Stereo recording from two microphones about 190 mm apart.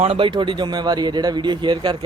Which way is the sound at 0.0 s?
30° right (ahead or behind).